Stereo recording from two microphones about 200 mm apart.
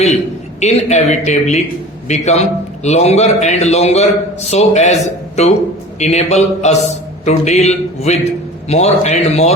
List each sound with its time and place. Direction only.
0.6 s a man's voice: 35° left (ahead or behind)